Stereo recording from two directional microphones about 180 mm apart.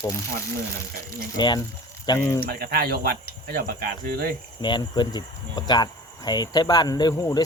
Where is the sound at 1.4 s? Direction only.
25° left (ahead or behind).